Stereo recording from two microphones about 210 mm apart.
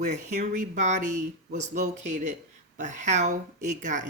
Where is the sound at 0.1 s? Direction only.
35° right (ahead or behind).